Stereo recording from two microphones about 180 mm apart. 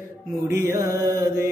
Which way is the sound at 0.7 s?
15° right (ahead or behind).